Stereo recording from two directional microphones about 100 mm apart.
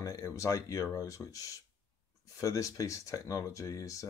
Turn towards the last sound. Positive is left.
turn(degrees=35)  # may be behind; listen again after turning